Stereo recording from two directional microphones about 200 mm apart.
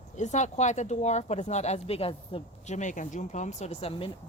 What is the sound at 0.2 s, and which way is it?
Speech, 35° left (ahead or behind).